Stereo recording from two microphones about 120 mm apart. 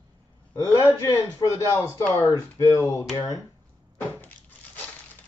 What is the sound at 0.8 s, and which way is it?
Speech, 25° left (ahead or behind).